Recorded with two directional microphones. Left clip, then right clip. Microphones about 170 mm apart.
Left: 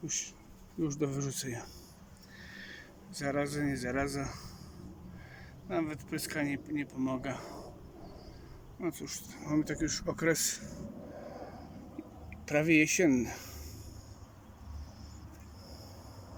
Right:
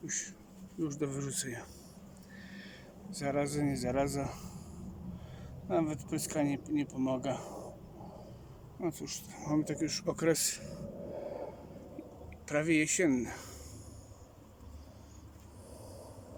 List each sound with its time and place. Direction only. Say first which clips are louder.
0.0 s speech: left 2 dB; centre (ahead or behind); by 4.4 s 15° right (ahead or behind)
5.6 s speech: right 2 dB; 20° right (ahead or behind)
8.8 s speech: even; 15° right (ahead or behind)
11.2 s a sound: right 3 dB; centre (ahead or behind)
12.5 s speech: left 3 dB; centre (ahead or behind)